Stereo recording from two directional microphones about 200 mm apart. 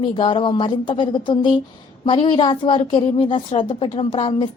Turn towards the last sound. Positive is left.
turn(degrees=25)  # may be behind; listen again after turning